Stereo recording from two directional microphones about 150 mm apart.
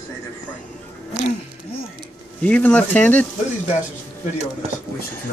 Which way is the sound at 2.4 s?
10° left (ahead or behind).